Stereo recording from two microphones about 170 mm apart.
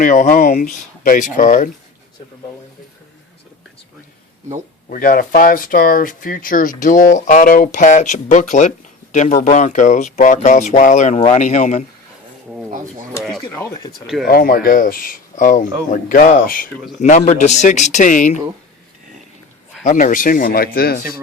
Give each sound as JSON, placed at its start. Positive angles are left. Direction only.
{"t": 0.0, "sound": "speech", "side_deg": 50}
{"t": 4.9, "sound": "speech", "side_deg": 55}
{"t": 13.6, "sound": "speech", "side_deg": 15}
{"t": 14.3, "sound": "speech", "side_deg": 60}
{"t": 19.8, "sound": "speech", "side_deg": 50}